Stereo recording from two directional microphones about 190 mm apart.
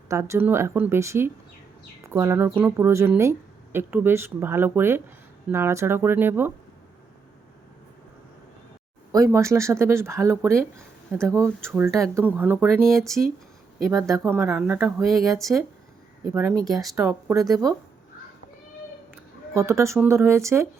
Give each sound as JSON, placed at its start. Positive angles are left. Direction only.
{"t": 0.1, "sound": "a woman's voice", "side_deg": -15}
{"t": 9.1, "sound": "a woman's voice", "side_deg": -15}
{"t": 13.9, "sound": "a woman's voice", "side_deg": -15}
{"t": 16.3, "sound": "a woman's voice", "side_deg": -15}
{"t": 16.6, "sound": "speech", "side_deg": 0}
{"t": 17.1, "sound": "a woman's voice", "side_deg": -10}
{"t": 19.1, "sound": "speech", "side_deg": -15}